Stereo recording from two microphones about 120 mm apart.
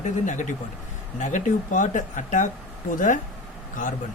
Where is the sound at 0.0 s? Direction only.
90° left.